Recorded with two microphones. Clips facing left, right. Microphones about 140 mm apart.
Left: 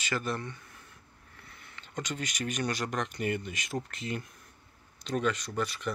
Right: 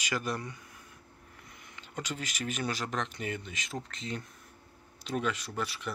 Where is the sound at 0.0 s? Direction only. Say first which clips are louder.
Left 1 dB; 10° right (ahead or behind).